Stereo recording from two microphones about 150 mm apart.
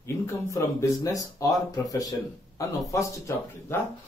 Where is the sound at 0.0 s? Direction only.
20° left (ahead or behind).